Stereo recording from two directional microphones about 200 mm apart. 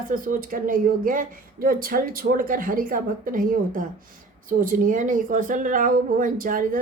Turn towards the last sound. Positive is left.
turn(degrees=-45)  # may be behind; listen again after turning